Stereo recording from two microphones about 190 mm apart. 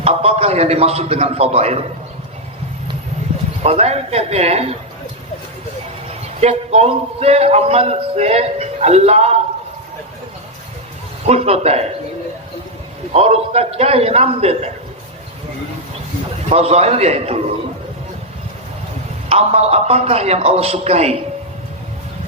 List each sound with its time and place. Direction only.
0.0 s a man's voice: 35° right (ahead or behind)
3.6 s a man's voice: 35° right (ahead or behind)
6.1 s a man's voice: 35° right (ahead or behind)
11.3 s a man's voice: 35° right (ahead or behind)
13.1 s a man's voice: 35° right (ahead or behind)
16.5 s a man's voice: 35° right (ahead or behind)
19.3 s a man's voice: 35° right (ahead or behind)